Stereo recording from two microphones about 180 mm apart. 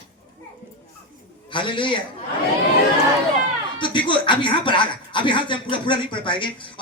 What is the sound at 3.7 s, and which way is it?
Speech, 25° left (ahead or behind).